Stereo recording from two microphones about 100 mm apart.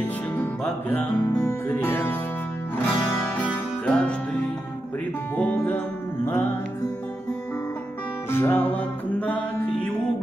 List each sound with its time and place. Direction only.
0.0 s music: 20° left (ahead or behind)
8.3 s music: 20° left (ahead or behind)